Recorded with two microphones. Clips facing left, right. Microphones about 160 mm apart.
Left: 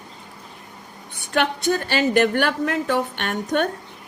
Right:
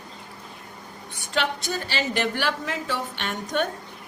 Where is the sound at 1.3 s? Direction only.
55° left (ahead or behind).